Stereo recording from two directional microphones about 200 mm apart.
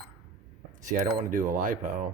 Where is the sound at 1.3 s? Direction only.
40° right (ahead or behind).